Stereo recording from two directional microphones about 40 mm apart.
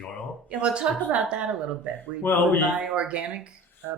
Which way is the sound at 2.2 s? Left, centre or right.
Left.